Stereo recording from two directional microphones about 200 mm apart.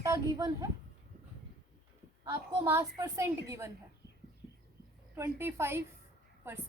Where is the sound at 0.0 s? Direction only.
15° right (ahead or behind).